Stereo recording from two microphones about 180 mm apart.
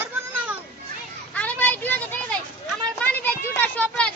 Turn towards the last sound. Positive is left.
turn(degrees=5)  # may be behind; listen again after turning